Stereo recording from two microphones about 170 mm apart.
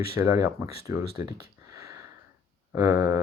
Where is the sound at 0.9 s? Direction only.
20° right (ahead or behind).